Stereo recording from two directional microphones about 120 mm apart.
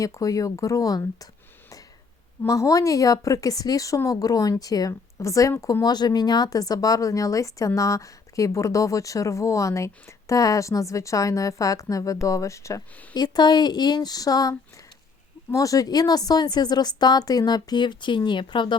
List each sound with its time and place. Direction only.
0.0 s a woman's voice: 30° left (ahead or behind)
2.5 s a woman's voice: 30° left (ahead or behind)
15.5 s a woman's voice: 30° left (ahead or behind)